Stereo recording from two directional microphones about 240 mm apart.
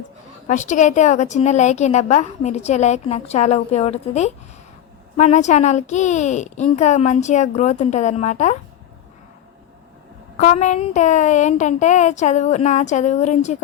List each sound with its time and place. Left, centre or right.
0.4 s a woman's voice: left
10.3 s a woman's voice: left